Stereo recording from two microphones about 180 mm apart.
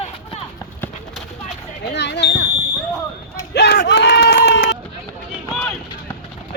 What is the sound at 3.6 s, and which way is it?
Run, 70° left (ahead or behind).